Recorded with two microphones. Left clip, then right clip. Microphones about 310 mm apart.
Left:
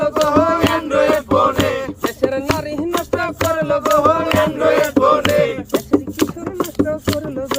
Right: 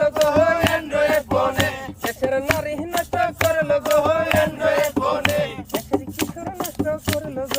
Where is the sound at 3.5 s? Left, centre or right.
Right.